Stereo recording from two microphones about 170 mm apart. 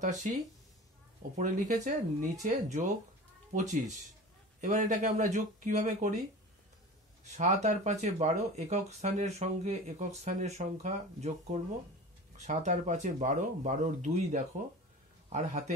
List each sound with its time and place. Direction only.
0.0 s speech: 45° right (ahead or behind)
4.6 s speech: 45° right (ahead or behind)
7.2 s a man's voice: 40° right (ahead or behind)